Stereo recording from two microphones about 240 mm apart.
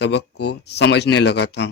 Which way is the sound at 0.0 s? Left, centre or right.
Left.